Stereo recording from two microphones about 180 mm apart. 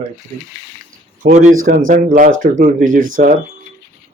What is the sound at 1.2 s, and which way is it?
Speech, 45° right (ahead or behind).